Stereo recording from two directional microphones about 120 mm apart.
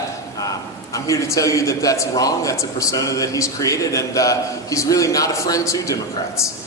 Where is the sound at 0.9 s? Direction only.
25° left (ahead or behind).